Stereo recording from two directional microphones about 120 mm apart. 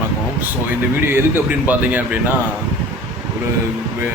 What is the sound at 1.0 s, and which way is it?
A man's voice, 15° right (ahead or behind).